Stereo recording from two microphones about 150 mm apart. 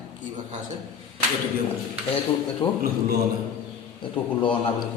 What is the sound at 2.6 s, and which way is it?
Speech, 35° left (ahead or behind).